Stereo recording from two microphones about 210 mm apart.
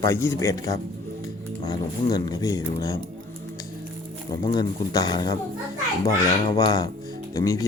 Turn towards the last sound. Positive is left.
turn(degrees=15)  # may be behind; listen again after turning